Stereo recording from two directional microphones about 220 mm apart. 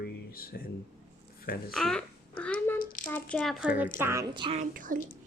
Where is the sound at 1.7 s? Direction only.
5° left (ahead or behind).